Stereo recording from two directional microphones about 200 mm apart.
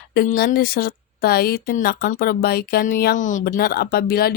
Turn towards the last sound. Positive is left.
turn(degrees=50)  # may be behind; listen again after turning